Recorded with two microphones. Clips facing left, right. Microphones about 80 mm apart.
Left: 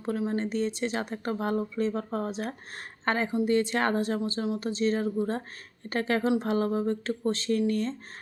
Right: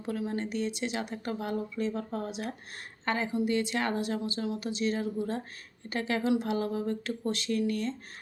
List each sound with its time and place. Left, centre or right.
0.0 s speech: left